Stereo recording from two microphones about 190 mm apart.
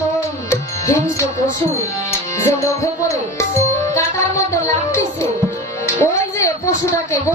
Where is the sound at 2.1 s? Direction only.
15° left (ahead or behind).